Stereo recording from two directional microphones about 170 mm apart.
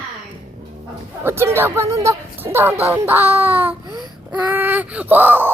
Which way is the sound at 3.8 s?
25° right (ahead or behind).